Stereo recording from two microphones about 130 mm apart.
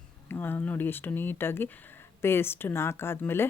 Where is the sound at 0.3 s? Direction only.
15° left (ahead or behind).